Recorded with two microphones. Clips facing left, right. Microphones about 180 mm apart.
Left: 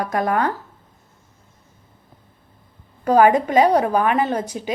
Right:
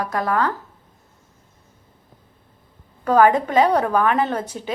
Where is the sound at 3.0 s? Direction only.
15° left (ahead or behind).